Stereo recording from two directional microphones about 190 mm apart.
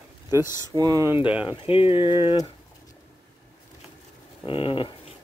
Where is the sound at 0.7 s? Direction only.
20° right (ahead or behind).